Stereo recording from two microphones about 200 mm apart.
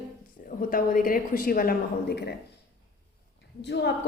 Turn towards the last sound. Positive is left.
turn(degrees=60)  # may be behind; listen again after turning